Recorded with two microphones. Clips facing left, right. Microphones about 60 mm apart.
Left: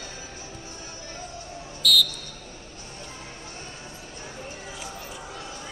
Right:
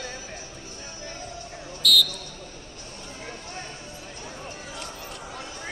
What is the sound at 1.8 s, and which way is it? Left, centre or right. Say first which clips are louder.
Basketball bounce: even; centre.